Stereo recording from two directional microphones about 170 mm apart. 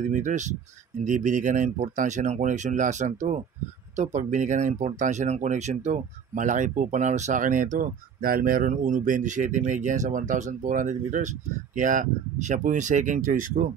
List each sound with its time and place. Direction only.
0.0 s speech: 45° right (ahead or behind)